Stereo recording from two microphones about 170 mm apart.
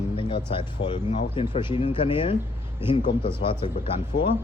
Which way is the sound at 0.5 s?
25° left (ahead or behind).